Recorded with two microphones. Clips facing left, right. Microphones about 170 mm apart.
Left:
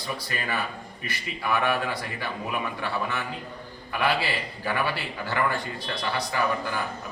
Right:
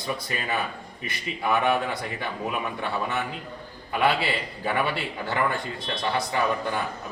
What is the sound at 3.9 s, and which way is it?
A man's voice, 20° right (ahead or behind).